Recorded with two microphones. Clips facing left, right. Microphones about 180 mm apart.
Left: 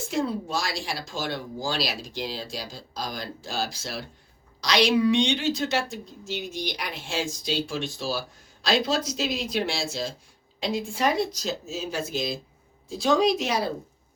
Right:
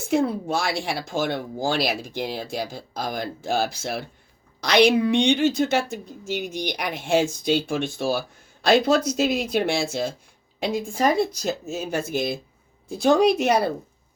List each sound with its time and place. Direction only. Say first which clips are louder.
0.1 s speech: right 6 dB; 55° right (ahead or behind)
6.3 s speech: right 5 dB; 10° right (ahead or behind)
6.6 s speech: right 4 dB; 60° right (ahead or behind)